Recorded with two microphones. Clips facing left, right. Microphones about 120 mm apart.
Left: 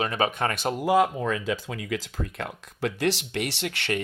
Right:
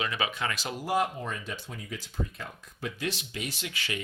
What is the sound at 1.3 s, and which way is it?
Speech, 90° left.